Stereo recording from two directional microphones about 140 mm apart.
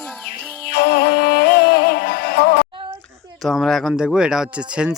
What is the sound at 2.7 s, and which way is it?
Child singing, 35° right (ahead or behind).